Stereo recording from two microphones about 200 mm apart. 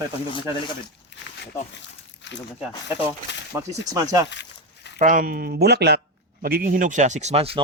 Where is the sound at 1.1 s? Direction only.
60° left (ahead or behind).